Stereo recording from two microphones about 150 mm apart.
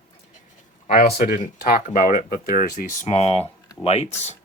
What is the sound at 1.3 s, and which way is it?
Speech, 70° left (ahead or behind).